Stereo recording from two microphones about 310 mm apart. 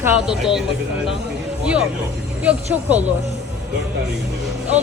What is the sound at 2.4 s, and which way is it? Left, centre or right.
Speech, centre.